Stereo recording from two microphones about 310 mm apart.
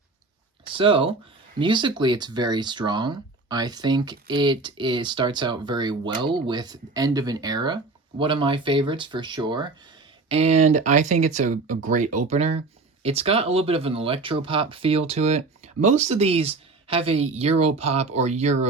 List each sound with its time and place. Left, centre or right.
0.7 s speech: centre